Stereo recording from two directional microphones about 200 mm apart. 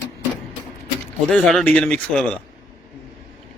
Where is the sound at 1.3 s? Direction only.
Centre (ahead or behind).